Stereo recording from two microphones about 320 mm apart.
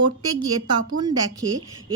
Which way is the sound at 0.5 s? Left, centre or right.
Right.